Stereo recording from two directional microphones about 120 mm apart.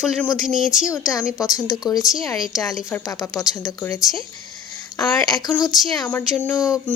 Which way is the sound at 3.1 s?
30° left (ahead or behind).